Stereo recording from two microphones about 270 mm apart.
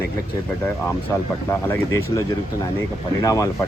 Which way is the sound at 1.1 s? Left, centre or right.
Centre.